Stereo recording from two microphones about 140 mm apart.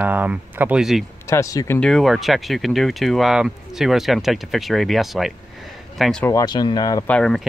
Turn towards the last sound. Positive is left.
turn(degrees=5)  # may be behind; listen again after turning